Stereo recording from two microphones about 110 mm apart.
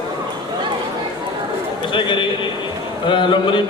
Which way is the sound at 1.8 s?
45° left (ahead or behind).